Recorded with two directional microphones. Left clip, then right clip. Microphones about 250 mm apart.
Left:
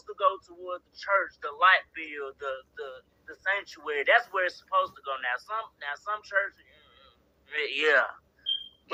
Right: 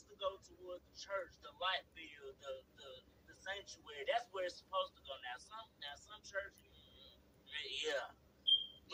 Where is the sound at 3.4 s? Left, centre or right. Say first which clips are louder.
Left 18 dB; left.